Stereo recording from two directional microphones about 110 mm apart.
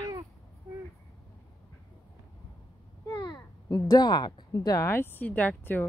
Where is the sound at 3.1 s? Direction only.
35° left (ahead or behind).